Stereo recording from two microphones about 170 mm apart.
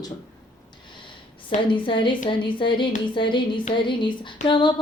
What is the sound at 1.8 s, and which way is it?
Female singing, 30° left (ahead or behind).